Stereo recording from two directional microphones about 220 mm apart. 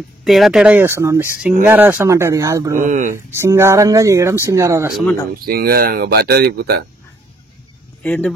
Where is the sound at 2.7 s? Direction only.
35° right (ahead or behind).